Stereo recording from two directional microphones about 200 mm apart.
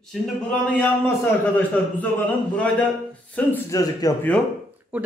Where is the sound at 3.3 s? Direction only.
10° left (ahead or behind).